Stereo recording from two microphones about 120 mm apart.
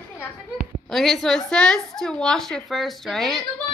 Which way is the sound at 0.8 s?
Centre (ahead or behind).